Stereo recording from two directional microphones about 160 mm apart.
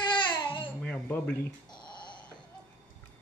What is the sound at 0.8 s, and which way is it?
Speech, 10° left (ahead or behind).